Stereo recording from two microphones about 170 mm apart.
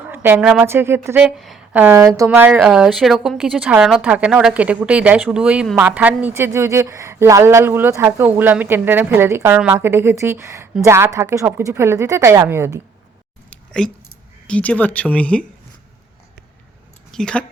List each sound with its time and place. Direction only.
0.1 s a woman's voice: 10° right (ahead or behind)
14.4 s speech: 5° left (ahead or behind)
17.1 s speech: 5° left (ahead or behind)